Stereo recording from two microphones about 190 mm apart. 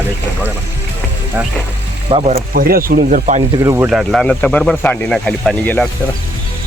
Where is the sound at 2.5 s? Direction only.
50° right (ahead or behind).